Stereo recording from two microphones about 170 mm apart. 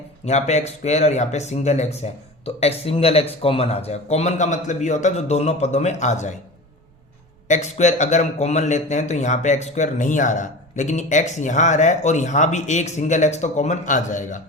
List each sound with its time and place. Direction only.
0.3 s speech: 40° left (ahead or behind)
7.4 s a man's voice: 45° left (ahead or behind)